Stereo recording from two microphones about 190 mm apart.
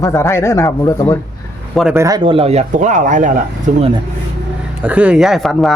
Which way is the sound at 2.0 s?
20° right (ahead or behind).